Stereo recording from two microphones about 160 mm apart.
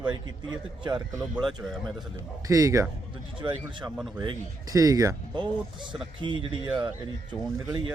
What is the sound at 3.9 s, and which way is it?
Speech, 5° right (ahead or behind).